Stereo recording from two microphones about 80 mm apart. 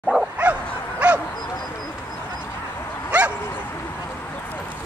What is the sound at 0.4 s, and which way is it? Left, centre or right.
Bow-wow, centre.